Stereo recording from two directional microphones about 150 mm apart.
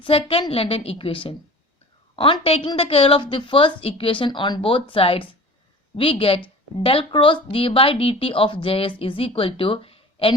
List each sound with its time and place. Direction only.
0.0 s a woman's voice: 40° left (ahead or behind)